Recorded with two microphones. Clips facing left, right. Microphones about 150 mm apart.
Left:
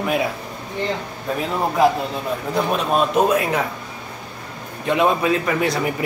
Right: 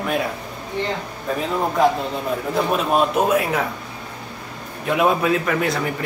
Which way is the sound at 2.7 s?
5° right (ahead or behind).